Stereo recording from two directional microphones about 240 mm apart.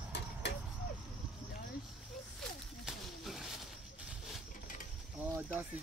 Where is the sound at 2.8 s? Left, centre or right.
Centre.